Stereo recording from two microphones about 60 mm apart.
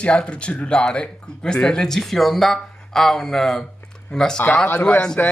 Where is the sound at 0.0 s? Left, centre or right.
Centre.